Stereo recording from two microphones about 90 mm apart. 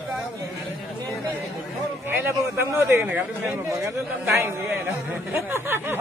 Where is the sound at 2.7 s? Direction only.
30° right (ahead or behind).